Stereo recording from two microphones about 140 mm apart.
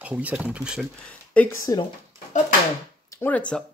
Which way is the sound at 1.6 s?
30° left (ahead or behind).